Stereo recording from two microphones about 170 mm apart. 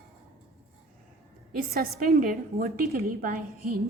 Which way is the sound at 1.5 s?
60° right (ahead or behind).